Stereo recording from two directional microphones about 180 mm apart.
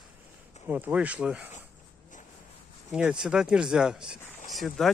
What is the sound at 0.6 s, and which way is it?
Speech, 10° right (ahead or behind).